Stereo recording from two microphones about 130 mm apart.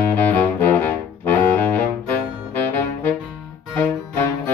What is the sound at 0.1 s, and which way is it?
Music, 10° left (ahead or behind).